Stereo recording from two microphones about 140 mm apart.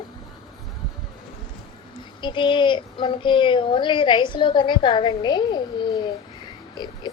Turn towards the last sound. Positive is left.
turn(degrees=30)  # may be behind; listen again after turning